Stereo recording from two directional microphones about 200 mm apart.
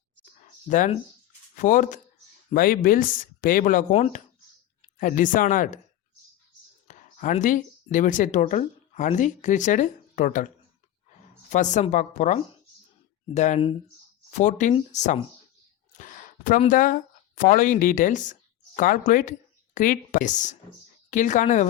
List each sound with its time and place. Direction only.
0.7 s speech: 40° left (ahead or behind)
3.9 s speech: 30° left (ahead or behind)
4.9 s speech: 40° left (ahead or behind)
6.8 s speech: 40° left (ahead or behind)
11.4 s speech: 35° left (ahead or behind)
14.3 s a woman's voice: 40° left (ahead or behind)